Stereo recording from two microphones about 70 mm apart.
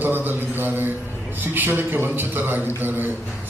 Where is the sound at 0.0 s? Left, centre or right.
Right.